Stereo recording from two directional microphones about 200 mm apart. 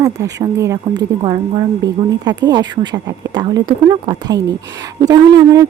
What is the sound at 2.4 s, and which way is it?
Speech, 20° right (ahead or behind).